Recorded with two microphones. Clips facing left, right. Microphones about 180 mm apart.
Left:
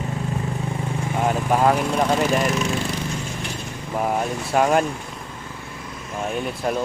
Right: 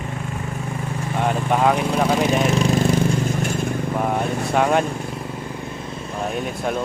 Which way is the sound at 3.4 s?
50° right (ahead or behind).